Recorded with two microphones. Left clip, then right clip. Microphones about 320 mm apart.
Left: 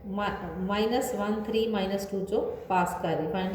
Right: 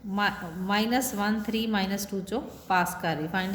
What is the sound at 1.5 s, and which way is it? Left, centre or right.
Speech, right.